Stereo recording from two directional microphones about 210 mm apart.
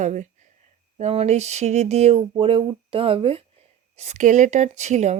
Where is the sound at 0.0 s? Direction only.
35° right (ahead or behind).